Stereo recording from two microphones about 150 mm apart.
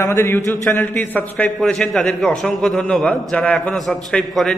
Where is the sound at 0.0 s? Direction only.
15° left (ahead or behind).